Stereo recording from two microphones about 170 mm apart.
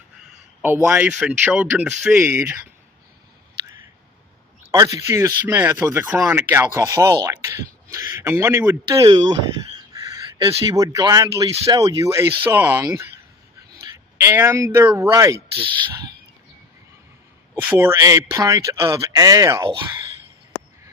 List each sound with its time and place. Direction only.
0.6 s speech: 10° right (ahead or behind)
4.7 s a man's voice: 20° right (ahead or behind)
8.9 s speech: 25° right (ahead or behind)
9.7 s a sound: 20° right (ahead or behind)
10.7 s speech: 20° right (ahead or behind)
15.5 s speech: 30° right (ahead or behind)
17.6 s speech: 10° right (ahead or behind)